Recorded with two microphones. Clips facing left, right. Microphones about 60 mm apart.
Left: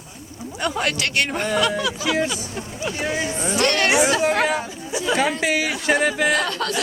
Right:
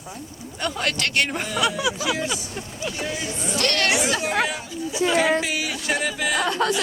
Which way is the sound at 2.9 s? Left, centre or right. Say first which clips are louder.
Left 6 dB; left.